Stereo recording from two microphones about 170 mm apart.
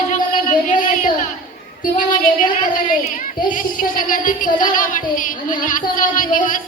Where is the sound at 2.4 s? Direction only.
45° left (ahead or behind).